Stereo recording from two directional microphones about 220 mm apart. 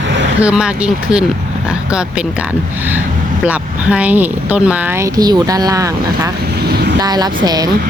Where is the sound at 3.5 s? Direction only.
5° right (ahead or behind).